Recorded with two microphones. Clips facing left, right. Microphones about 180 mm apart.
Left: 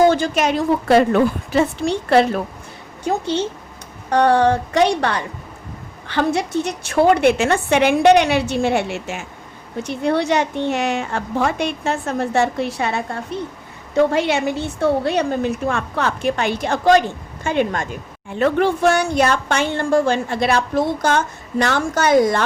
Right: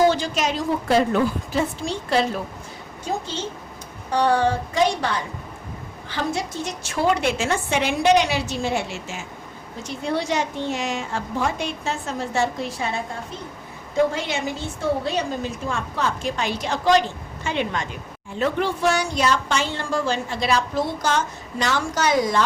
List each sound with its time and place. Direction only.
0.1 s a woman's voice: 55° left (ahead or behind)
18.3 s a woman's voice: 60° left (ahead or behind)